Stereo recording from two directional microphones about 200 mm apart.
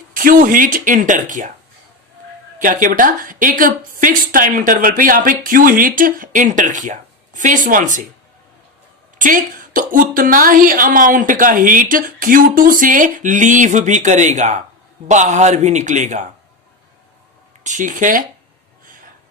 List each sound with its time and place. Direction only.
0.1 s a woman's voice: 45° right (ahead or behind)
2.6 s a woman's voice: 40° right (ahead or behind)
9.1 s a woman's voice: 40° right (ahead or behind)
17.6 s a man's voice: 40° right (ahead or behind)